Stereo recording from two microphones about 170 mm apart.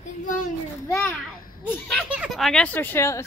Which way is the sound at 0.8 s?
15° left (ahead or behind).